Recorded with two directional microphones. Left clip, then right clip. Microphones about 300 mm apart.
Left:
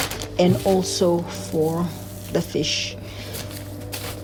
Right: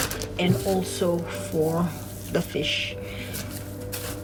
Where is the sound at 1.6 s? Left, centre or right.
Centre.